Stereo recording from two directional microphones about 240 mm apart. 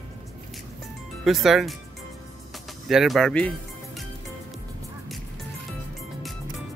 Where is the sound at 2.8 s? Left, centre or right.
Centre.